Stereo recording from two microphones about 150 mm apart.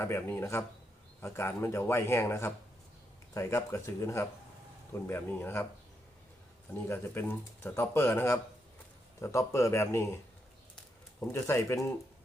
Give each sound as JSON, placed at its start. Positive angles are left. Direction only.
{"t": 0.0, "sound": "speech", "side_deg": 15}
{"t": 6.8, "sound": "speech", "side_deg": 15}
{"t": 11.2, "sound": "speech", "side_deg": 15}